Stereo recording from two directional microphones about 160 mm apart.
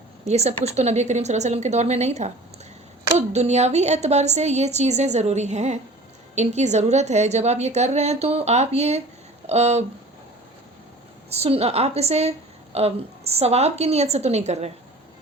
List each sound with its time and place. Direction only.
0.3 s a woman's voice: 40° right (ahead or behind)
11.3 s a woman's voice: 40° right (ahead or behind)